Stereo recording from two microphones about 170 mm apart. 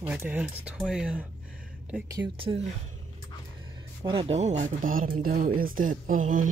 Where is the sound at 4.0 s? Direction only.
30° right (ahead or behind); by 6.5 s 50° right (ahead or behind).